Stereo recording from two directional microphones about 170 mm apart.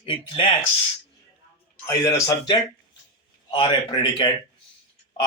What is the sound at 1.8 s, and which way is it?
A man's voice, 15° left (ahead or behind).